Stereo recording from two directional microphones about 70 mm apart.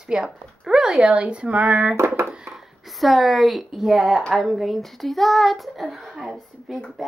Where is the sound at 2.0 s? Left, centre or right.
Right.